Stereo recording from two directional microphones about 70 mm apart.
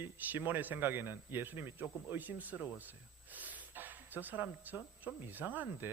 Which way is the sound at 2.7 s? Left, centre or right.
Right.